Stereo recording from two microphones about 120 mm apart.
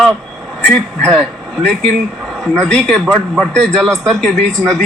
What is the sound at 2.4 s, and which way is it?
Speech, 5° left (ahead or behind).